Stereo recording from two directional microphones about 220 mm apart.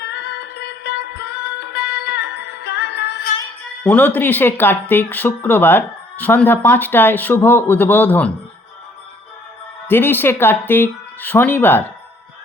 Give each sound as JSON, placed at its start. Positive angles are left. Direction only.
{"t": 0.0, "sound": "music", "side_deg": 50}
{"t": 3.8, "sound": "speech", "side_deg": 10}
{"t": 9.8, "sound": "speech", "side_deg": 10}